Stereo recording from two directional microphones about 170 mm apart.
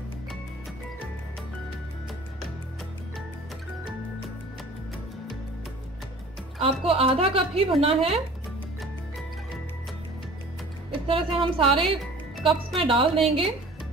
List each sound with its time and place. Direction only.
6.6 s a woman's voice: 35° right (ahead or behind)
10.9 s a woman's voice: 30° right (ahead or behind)